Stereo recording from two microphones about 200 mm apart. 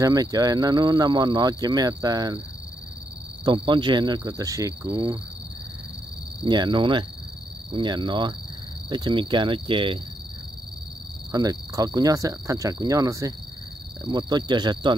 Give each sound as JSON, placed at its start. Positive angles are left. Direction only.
{"t": 0.0, "sound": "speech", "side_deg": -20}
{"t": 3.4, "sound": "speech", "side_deg": -25}
{"t": 6.4, "sound": "speech", "side_deg": -20}
{"t": 11.3, "sound": "cricket", "side_deg": -20}
{"t": 14.0, "sound": "speech", "side_deg": -20}